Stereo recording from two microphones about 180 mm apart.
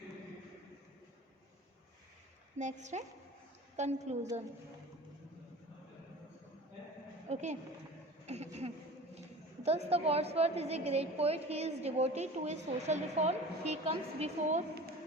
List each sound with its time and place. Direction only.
2.6 s a woman's voice: 40° right (ahead or behind)
7.3 s a woman's voice: 40° right (ahead or behind)